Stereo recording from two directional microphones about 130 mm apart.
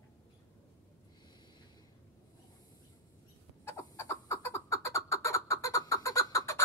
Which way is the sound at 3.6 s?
20° left (ahead or behind).